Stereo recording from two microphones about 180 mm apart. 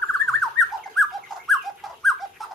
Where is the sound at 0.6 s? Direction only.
Centre (ahead or behind).